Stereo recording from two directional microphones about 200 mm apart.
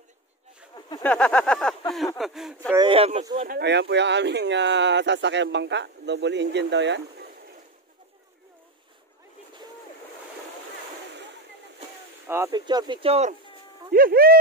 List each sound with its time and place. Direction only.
0.7 s a sound: 20° left (ahead or behind)
1.0 s a sound: 5° left (ahead or behind)
2.7 s speech: 25° right (ahead or behind)
3.3 s speech: 50° right (ahead or behind)
12.4 s speech: 20° right (ahead or behind)
13.9 s speech: 45° right (ahead or behind)